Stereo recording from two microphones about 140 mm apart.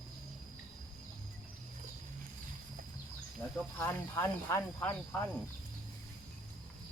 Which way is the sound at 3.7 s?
15° left (ahead or behind).